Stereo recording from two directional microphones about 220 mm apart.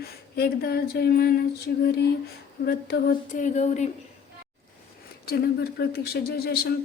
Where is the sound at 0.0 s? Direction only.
45° left (ahead or behind).